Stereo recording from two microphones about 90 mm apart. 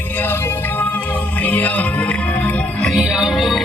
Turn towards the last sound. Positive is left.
turn(degrees=-5)  # may be behind; listen again after turning